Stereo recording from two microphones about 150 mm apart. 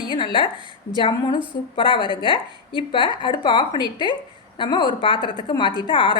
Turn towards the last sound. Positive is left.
turn(degrees=35)  # may be behind; listen again after turning